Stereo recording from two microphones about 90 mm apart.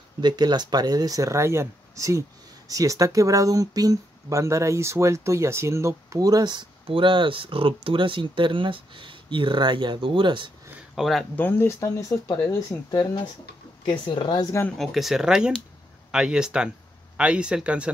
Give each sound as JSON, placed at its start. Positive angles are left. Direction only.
{"t": 0.2, "sound": "speech", "side_deg": -55}
{"t": 6.9, "sound": "speech", "side_deg": -65}
{"t": 11.0, "sound": "speech", "side_deg": 0}
{"t": 11.3, "sound": "speech", "side_deg": 20}
{"t": 12.9, "sound": "speech", "side_deg": 55}
{"t": 13.8, "sound": "speech", "side_deg": 70}
{"t": 14.8, "sound": "speech", "side_deg": 0}